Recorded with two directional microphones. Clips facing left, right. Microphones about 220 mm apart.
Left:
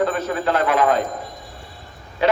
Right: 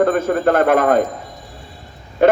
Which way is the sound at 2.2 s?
50° right (ahead or behind).